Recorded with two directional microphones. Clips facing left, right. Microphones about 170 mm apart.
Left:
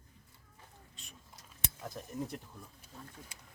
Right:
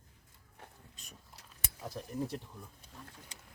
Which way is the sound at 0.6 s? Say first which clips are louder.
Right 6 dB; 70° right (ahead or behind).